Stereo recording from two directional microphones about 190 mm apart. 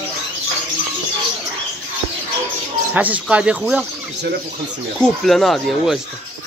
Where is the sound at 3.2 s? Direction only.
5° right (ahead or behind).